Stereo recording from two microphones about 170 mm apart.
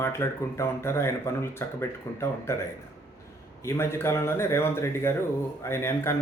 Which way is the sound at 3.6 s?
15° left (ahead or behind).